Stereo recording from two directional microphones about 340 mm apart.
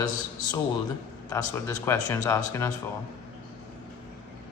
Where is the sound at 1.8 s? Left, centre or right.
Centre.